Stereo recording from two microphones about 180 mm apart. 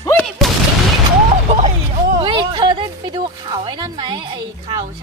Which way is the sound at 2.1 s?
25° right (ahead or behind).